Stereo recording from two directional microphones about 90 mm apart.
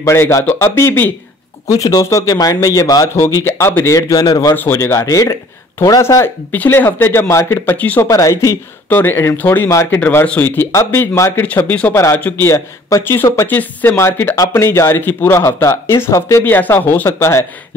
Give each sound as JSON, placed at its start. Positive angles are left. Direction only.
{"t": 0.0, "sound": "speech", "side_deg": 30}
{"t": 1.7, "sound": "speech", "side_deg": 45}
{"t": 3.4, "sound": "speech", "side_deg": 30}
{"t": 4.6, "sound": "speech", "side_deg": 30}
{"t": 7.7, "sound": "speech", "side_deg": 15}
{"t": 8.1, "sound": "speech", "side_deg": 35}
{"t": 8.8, "sound": "speech", "side_deg": 20}
{"t": 12.2, "sound": "speech", "side_deg": 20}
{"t": 12.4, "sound": "speech", "side_deg": 30}
{"t": 16.4, "sound": "speech", "side_deg": 20}